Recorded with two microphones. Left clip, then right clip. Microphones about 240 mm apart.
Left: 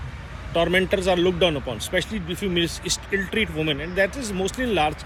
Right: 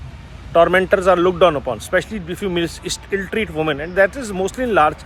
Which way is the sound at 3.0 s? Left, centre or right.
Right.